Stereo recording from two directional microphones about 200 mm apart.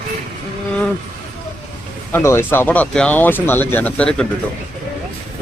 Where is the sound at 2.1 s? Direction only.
10° left (ahead or behind).